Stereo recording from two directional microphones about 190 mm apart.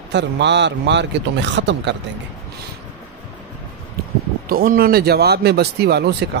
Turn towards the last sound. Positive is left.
turn(degrees=-60)  # may be behind; listen again after turning